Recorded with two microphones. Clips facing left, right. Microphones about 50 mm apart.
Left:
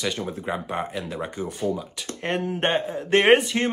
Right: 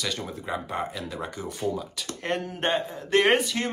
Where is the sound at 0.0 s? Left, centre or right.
Left.